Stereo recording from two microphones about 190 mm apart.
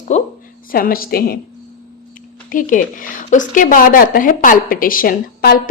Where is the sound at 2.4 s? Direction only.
45° left (ahead or behind).